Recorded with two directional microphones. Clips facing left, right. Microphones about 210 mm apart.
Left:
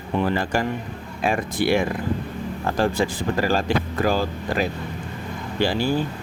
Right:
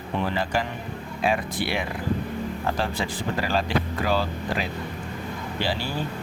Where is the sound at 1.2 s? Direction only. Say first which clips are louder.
Left 3 dB; 45° left (ahead or behind).